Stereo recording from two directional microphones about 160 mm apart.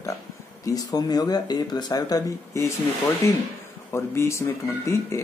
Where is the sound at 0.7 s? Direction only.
25° left (ahead or behind).